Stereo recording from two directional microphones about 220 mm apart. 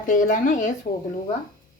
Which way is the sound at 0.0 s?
35° left (ahead or behind).